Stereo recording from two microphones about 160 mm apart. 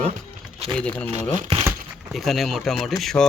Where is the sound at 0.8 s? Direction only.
10° left (ahead or behind).